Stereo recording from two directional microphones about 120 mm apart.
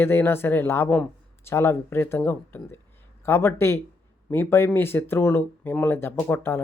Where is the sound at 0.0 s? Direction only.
20° left (ahead or behind).